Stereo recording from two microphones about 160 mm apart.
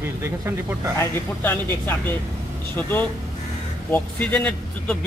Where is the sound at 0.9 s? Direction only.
15° left (ahead or behind).